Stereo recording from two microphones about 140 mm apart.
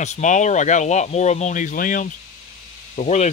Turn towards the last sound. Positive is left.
turn(degrees=55)  # may be behind; listen again after turning